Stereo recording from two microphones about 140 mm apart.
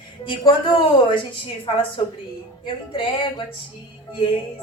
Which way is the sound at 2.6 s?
35° left (ahead or behind).